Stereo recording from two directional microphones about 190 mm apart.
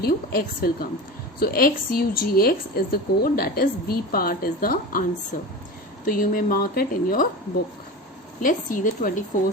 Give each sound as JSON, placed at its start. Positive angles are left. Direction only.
{"t": 0.0, "sound": "a woman's voice", "side_deg": 50}
{"t": 6.1, "sound": "a woman's voice", "side_deg": 50}
{"t": 8.4, "sound": "a woman's voice", "side_deg": 45}